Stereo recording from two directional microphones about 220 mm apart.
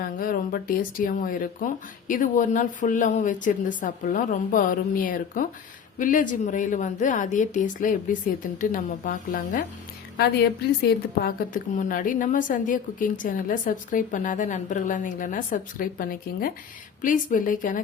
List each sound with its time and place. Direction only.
0.0 s a woman's voice: 40° left (ahead or behind)
10.8 s a woman's voice: 40° left (ahead or behind)